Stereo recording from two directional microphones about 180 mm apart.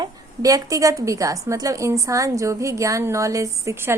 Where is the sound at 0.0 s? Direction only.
20° right (ahead or behind).